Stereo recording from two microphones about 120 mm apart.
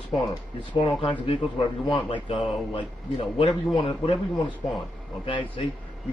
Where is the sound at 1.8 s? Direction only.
50° left (ahead or behind).